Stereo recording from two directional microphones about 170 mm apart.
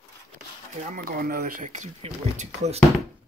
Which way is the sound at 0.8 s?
55° right (ahead or behind).